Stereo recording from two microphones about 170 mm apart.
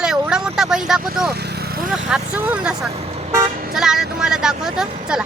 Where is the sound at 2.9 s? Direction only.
35° right (ahead or behind).